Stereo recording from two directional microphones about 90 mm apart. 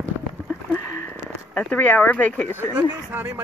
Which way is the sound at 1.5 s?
15° left (ahead or behind).